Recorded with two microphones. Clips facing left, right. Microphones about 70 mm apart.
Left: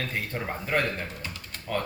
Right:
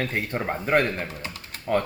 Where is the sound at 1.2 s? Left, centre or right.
Right.